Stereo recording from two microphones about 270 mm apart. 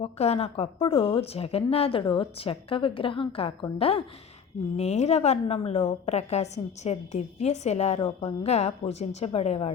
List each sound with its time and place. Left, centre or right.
0.0 s a woman's voice: left